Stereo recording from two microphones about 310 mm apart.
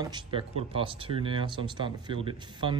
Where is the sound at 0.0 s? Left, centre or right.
Centre.